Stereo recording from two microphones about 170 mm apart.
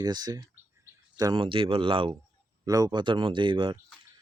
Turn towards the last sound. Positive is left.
turn(degrees=-30)  # may be behind; listen again after turning